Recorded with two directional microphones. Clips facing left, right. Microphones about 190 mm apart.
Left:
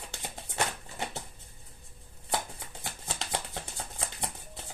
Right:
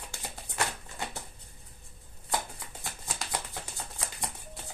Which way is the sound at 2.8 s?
25° left (ahead or behind).